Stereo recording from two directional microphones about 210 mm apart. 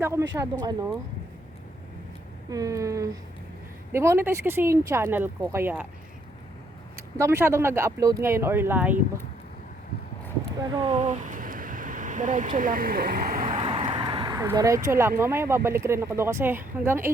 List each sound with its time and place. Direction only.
0.0 s speech: 15° right (ahead or behind)
2.5 s speech: 15° right (ahead or behind)
6.9 s speech: 10° right (ahead or behind)
10.6 s speech: 20° right (ahead or behind)
10.9 s a sound: 35° right (ahead or behind)
13.6 s a sound: 25° right (ahead or behind)
15.2 s speech: 10° right (ahead or behind)